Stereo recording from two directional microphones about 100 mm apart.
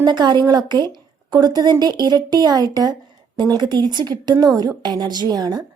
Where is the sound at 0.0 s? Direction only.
50° right (ahead or behind).